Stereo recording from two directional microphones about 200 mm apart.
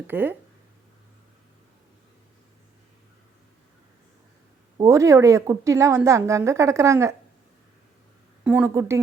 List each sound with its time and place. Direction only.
0.1 s speech: 10° right (ahead or behind)
4.8 s speech: 15° right (ahead or behind)
8.4 s speech: 10° right (ahead or behind)